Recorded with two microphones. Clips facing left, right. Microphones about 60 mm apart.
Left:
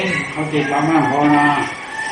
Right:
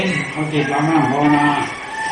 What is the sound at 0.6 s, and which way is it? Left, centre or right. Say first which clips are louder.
Speech: left 1 dB; centre.